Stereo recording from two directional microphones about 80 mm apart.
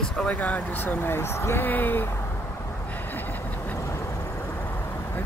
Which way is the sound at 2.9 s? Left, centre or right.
Left.